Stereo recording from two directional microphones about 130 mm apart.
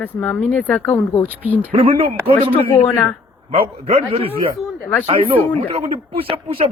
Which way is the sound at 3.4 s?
50° right (ahead or behind).